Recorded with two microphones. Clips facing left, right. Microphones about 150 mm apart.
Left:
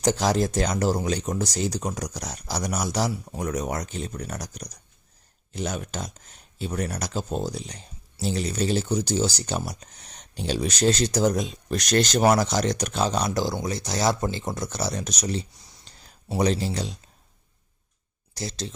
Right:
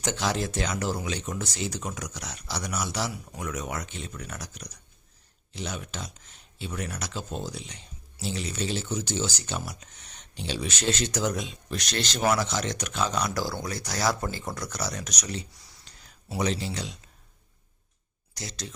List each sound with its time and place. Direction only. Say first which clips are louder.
0.0 s speech: left 6 dB; 40° left (ahead or behind)
18.3 s speech: left 6 dB; 30° left (ahead or behind)